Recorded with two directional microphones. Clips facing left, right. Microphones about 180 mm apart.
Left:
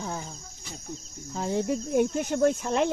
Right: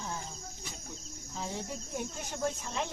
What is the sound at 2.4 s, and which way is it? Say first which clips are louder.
Speech: left 10 dB; 70° left (ahead or behind).